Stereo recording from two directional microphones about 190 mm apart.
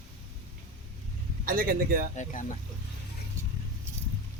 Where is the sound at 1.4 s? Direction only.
50° right (ahead or behind).